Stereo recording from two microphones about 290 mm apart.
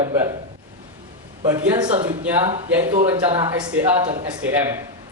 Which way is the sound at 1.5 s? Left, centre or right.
Centre.